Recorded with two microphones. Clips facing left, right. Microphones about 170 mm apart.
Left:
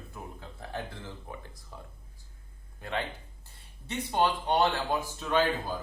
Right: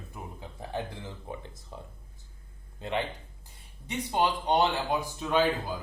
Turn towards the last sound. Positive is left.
turn(degrees=-15)  # may be behind; listen again after turning